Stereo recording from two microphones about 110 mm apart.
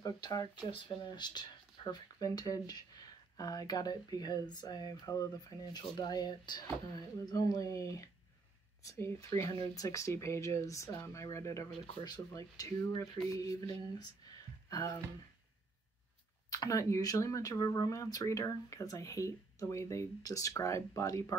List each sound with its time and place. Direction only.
0.0 s speech: 35° left (ahead or behind)
13.3 s a sound: 30° left (ahead or behind)
16.4 s speech: 30° left (ahead or behind)